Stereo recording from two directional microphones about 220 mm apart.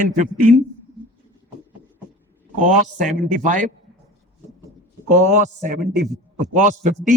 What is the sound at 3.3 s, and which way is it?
Speech, 35° right (ahead or behind).